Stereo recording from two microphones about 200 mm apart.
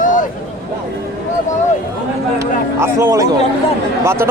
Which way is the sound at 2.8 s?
15° right (ahead or behind).